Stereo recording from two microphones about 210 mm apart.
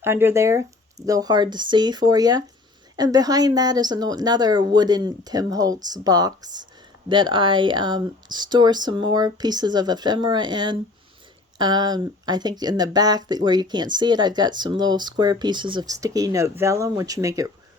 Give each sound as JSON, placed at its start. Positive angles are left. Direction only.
{"t": 0.0, "sound": "speech", "side_deg": -10}